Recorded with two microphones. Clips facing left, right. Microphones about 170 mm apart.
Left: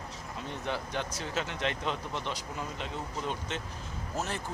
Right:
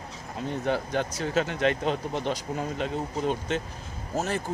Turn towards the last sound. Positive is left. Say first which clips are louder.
# right 6 dB
turn(degrees=-45)  # may be behind; listen again after turning